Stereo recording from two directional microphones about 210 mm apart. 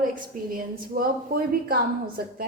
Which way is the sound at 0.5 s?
45° right (ahead or behind).